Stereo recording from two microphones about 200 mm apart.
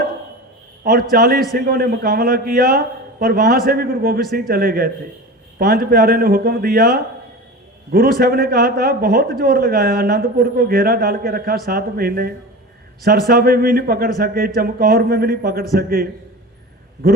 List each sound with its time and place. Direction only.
1.1 s a man's voice: 45° right (ahead or behind)